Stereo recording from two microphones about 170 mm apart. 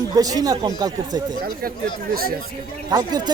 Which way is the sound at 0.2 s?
20° right (ahead or behind).